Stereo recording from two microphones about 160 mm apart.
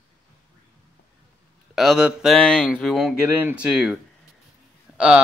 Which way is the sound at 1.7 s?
Centre (ahead or behind).